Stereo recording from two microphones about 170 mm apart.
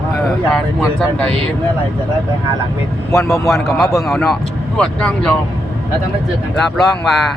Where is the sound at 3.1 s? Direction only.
20° left (ahead or behind).